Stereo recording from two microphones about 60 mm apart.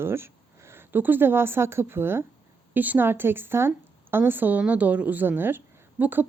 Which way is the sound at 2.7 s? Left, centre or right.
Right.